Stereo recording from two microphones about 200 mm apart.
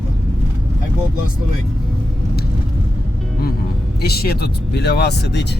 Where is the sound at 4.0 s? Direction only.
50° left (ahead or behind).